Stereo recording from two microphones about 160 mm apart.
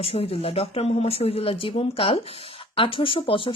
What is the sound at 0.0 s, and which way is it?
Speech, 35° left (ahead or behind).